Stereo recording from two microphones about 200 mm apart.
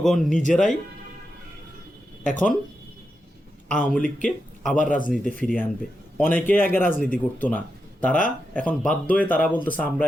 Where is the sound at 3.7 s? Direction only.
5° left (ahead or behind).